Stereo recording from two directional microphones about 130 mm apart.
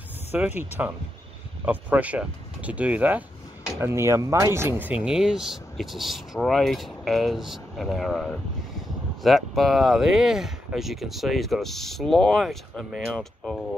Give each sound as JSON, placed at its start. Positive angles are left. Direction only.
{"t": 0.6, "sound": "speech", "side_deg": -15}